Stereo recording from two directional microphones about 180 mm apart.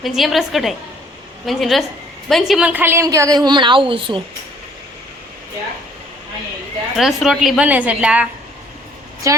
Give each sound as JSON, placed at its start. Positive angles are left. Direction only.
{"t": 0.0, "sound": "a woman's voice", "side_deg": 0}
{"t": 6.9, "sound": "a woman's voice", "side_deg": 0}